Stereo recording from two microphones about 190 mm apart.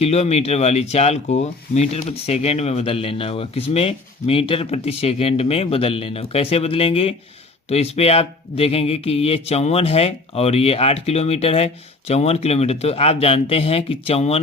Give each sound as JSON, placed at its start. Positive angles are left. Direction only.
{"t": 0.0, "sound": "speech", "side_deg": 35}